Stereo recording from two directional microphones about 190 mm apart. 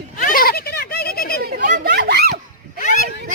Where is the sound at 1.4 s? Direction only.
50° right (ahead or behind).